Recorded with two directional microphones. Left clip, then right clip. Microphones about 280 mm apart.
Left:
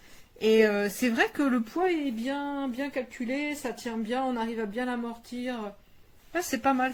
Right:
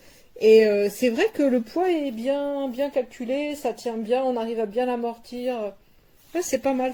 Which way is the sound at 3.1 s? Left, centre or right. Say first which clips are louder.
Right 5 dB; left.